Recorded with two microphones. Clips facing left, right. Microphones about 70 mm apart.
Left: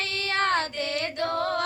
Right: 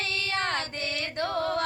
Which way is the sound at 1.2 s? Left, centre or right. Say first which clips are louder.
Left 1 dB; left.